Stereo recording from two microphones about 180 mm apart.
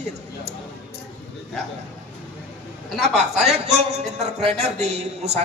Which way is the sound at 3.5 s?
35° right (ahead or behind).